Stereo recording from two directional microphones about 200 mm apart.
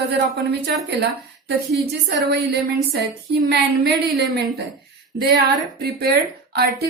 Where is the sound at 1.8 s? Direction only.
55° right (ahead or behind).